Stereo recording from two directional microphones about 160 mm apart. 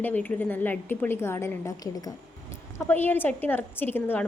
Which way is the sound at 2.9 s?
10° left (ahead or behind).